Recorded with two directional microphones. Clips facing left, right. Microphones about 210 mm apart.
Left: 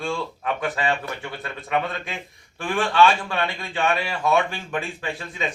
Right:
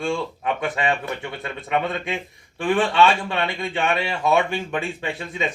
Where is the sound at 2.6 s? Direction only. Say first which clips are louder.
Right 1 dB; 25° right (ahead or behind).